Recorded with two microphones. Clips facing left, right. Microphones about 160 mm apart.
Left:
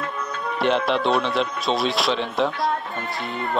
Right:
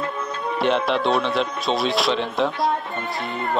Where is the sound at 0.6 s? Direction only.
Centre (ahead or behind).